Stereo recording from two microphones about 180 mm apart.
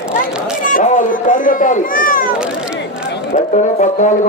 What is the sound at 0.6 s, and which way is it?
Speech, 50° left (ahead or behind).